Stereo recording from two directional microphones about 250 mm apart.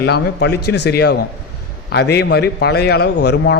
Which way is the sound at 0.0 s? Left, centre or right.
Left.